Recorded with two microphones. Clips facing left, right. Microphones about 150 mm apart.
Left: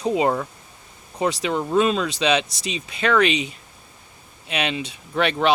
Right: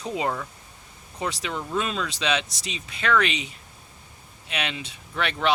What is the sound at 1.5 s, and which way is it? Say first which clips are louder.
Speech: left 8 dB; 35° left (ahead or behind).